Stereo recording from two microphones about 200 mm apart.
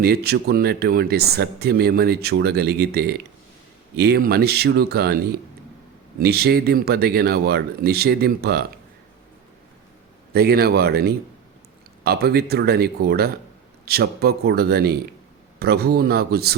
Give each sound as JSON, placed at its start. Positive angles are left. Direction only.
{"t": 0.0, "sound": "speech", "side_deg": -50}
{"t": 10.3, "sound": "speech", "side_deg": -50}